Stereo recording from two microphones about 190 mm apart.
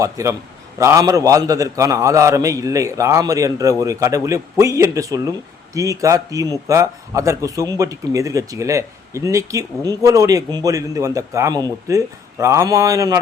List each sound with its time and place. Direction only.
0.0 s speech: 15° right (ahead or behind)